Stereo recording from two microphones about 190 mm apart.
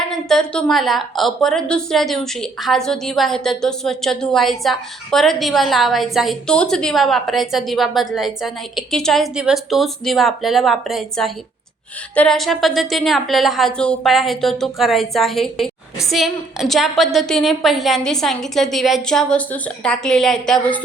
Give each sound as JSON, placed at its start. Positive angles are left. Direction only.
{"t": 0.3, "sound": "a woman's voice", "side_deg": 0}